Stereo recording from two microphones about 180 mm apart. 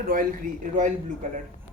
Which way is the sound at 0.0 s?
50° right (ahead or behind).